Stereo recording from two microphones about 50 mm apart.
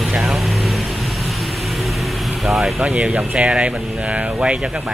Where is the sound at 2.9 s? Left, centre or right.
Right.